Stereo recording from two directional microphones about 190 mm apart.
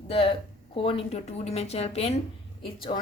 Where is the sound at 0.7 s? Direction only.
30° left (ahead or behind).